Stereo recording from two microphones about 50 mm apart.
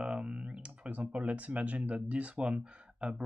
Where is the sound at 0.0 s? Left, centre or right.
Right.